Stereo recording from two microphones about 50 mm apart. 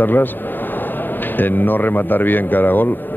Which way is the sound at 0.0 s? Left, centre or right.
Left.